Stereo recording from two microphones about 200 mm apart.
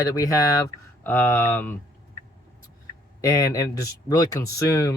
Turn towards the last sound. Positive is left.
turn(degrees=15)  # may be behind; listen again after turning